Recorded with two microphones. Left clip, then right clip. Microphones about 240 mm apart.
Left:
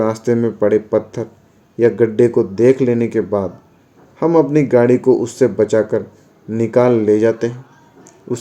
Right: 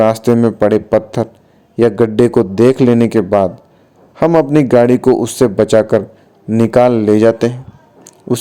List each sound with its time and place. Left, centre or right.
0.0 s speech: right